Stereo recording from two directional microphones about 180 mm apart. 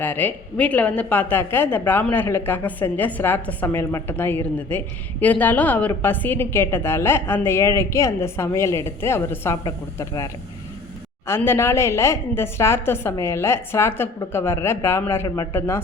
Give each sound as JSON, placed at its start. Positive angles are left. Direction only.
{"t": 0.0, "sound": "a woman's voice", "side_deg": 10}
{"t": 11.3, "sound": "a woman's voice", "side_deg": 15}